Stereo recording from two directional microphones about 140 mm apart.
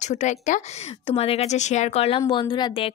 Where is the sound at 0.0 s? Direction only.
55° left (ahead or behind).